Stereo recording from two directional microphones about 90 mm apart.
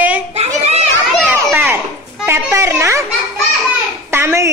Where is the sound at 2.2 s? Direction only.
30° right (ahead or behind).